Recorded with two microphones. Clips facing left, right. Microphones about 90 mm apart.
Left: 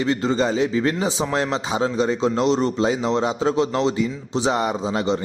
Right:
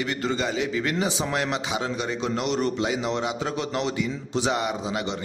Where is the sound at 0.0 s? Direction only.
30° left (ahead or behind).